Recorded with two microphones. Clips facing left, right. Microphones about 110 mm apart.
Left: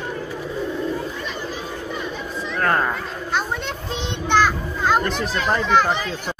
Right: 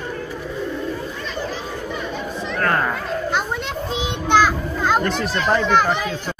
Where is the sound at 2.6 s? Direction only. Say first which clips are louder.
Even; 15° left (ahead or behind).